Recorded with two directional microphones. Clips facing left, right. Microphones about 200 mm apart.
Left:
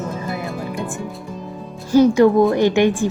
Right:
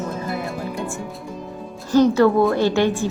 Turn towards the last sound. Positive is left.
turn(degrees=15)  # may be behind; listen again after turning